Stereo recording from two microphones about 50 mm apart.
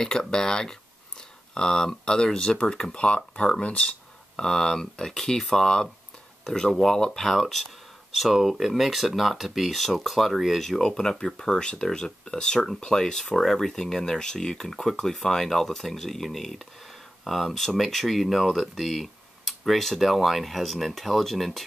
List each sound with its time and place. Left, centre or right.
0.0 s speech: centre